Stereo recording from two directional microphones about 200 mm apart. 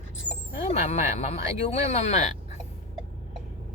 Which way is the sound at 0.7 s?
35° left (ahead or behind).